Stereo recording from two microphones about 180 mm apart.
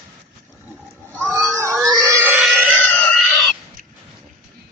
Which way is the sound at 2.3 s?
Centre (ahead or behind).